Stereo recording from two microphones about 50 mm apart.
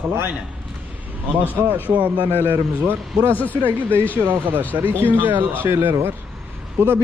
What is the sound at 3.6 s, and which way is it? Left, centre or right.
A man's voice, right.